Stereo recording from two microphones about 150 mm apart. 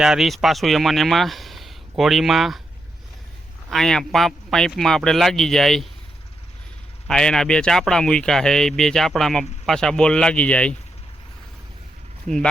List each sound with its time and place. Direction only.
0.0 s speech: 5° right (ahead or behind)
3.7 s speech: 5° left (ahead or behind)
7.1 s speech: 5° left (ahead or behind)
12.3 s speech: 55° right (ahead or behind)